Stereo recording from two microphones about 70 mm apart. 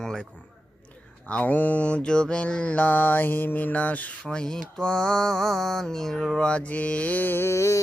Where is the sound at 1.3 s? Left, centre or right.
Left.